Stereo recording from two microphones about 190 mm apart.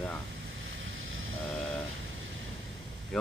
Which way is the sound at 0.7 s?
90° right.